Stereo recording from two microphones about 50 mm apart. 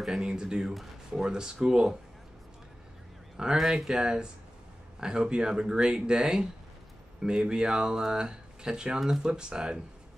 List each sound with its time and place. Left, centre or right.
0.0 s speech: centre
3.4 s speech: centre